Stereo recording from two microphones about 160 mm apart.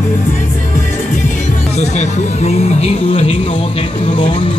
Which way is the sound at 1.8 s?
45° left (ahead or behind).